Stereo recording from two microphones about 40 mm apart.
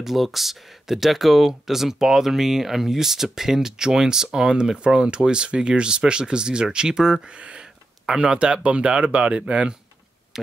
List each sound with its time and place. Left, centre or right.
0.0 s speech: centre; by 9.8 s right
10.3 s speech: centre